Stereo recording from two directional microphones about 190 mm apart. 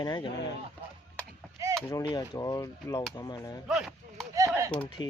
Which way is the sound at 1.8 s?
20° left (ahead or behind).